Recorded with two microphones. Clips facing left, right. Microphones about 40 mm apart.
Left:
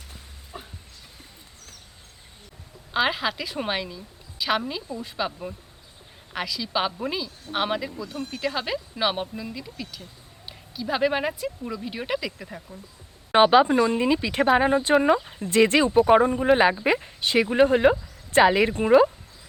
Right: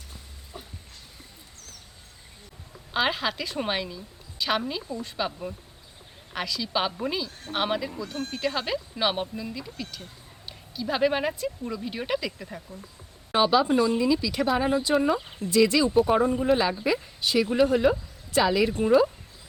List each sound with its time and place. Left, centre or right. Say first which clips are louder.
0.5 s a sound: left 3 dB; left
2.9 s a woman's voice: left 2 dB; centre
10.8 s a woman's voice: left 1 dB; centre
13.3 s speech: left 5 dB; left